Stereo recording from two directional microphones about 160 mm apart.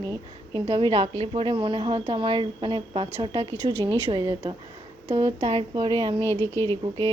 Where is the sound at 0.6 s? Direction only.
35° right (ahead or behind).